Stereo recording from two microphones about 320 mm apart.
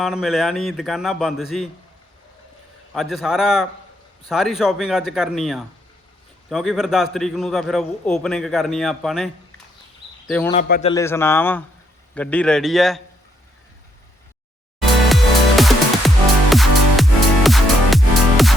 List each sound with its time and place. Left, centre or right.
0.0 s a man's voice: centre
2.9 s a man's voice: centre
10.5 s a man's voice: left
10.9 s a man's voice: centre
15.1 s music: centre